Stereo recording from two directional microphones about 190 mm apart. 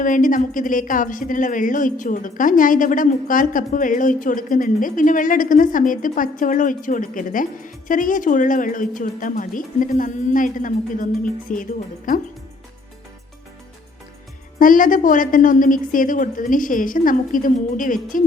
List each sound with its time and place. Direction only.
0.0 s a woman's voice: 45° left (ahead or behind)
14.6 s a woman's voice: 45° left (ahead or behind)